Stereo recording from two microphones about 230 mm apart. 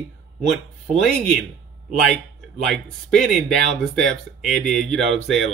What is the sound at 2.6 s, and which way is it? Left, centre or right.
Speech, centre.